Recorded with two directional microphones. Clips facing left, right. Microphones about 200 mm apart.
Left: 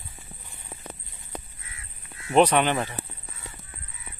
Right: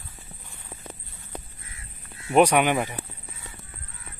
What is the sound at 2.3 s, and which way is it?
Speech, 10° right (ahead or behind).